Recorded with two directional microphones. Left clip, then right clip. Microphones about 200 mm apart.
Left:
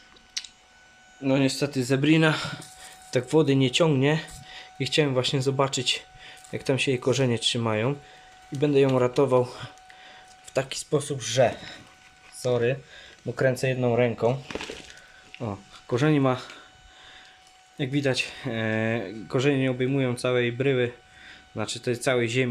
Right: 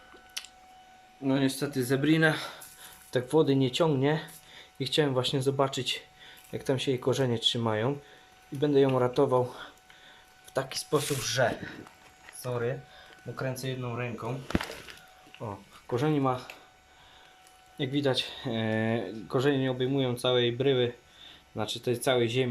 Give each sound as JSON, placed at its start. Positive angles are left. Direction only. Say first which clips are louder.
{"t": 0.4, "sound": "squish", "louder": "left 6 dB", "side_deg": -15}
{"t": 1.2, "sound": "speech", "louder": "left 5 dB", "side_deg": 5}
{"t": 13.3, "sound": "speech", "louder": "left 11 dB", "side_deg": 35}
{"t": 15.9, "sound": "speech", "louder": "left 5 dB", "side_deg": 15}
{"t": 17.7, "sound": "speech", "louder": "left 3 dB", "side_deg": 5}